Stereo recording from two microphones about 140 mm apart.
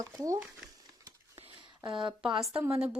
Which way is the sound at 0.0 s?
25° right (ahead or behind).